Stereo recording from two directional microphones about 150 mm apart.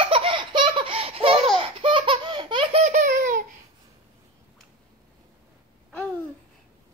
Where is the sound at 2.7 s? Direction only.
55° right (ahead or behind).